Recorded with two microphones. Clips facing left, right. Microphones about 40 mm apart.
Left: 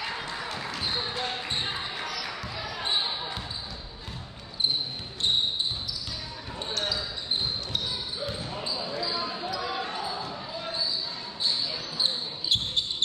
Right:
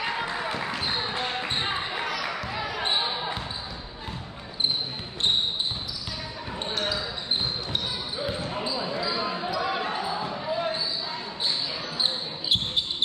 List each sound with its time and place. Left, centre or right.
0.0 s basketball bounce: right
2.9 s basketball bounce: centre
6.7 s basketball bounce: centre
12.0 s basketball bounce: centre